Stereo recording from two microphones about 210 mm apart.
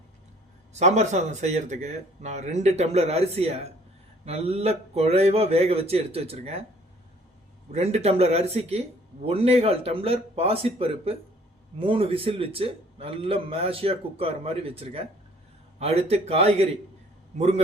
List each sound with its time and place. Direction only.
0.7 s a man's voice: 30° right (ahead or behind)
7.7 s a man's voice: 30° right (ahead or behind)